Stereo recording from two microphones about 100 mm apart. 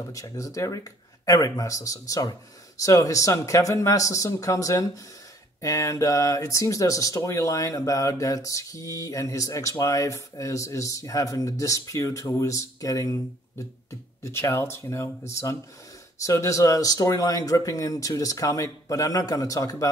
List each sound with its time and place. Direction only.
0.1 s speech: 35° left (ahead or behind)